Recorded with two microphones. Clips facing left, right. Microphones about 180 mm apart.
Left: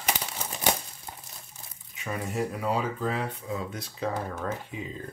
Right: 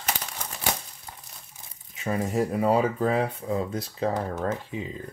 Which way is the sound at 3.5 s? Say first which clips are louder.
Right 6 dB; 35° right (ahead or behind).